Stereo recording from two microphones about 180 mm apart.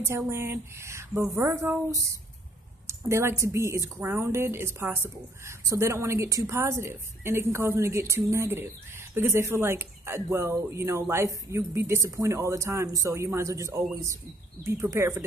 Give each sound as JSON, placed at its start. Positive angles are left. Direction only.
{"t": 0.0, "sound": "a woman's voice", "side_deg": -15}